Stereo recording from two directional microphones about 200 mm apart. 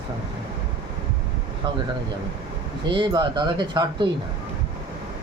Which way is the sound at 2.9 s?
25° right (ahead or behind).